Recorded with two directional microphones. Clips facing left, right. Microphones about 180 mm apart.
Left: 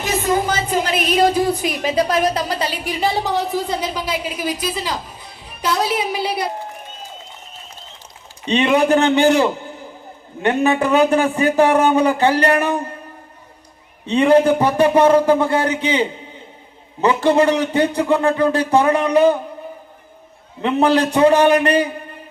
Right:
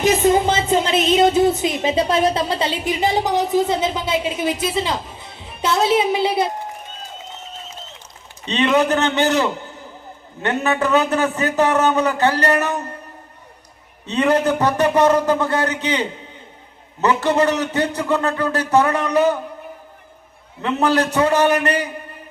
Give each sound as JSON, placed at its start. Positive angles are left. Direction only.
{"t": 0.0, "sound": "a woman's voice", "side_deg": -20}
{"t": 8.4, "sound": "a man's voice", "side_deg": 15}
{"t": 14.1, "sound": "a man's voice", "side_deg": 10}
{"t": 20.6, "sound": "a man's voice", "side_deg": 15}